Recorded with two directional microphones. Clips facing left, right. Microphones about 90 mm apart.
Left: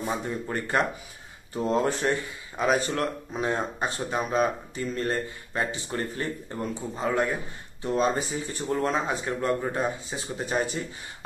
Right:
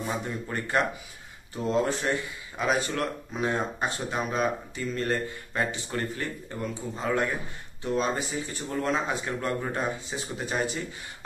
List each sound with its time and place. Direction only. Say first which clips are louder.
0.2 s speech: left 2 dB; 30° left (ahead or behind)
10.1 s speech: left 2 dB; 35° left (ahead or behind)